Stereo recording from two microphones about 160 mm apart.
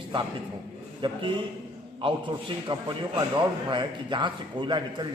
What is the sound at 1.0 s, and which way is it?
A man's voice, 30° right (ahead or behind).